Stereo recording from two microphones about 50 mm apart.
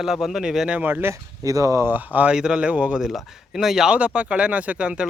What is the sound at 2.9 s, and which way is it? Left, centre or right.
Speech, centre.